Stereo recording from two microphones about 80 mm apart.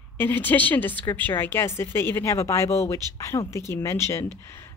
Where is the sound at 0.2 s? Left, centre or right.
Left.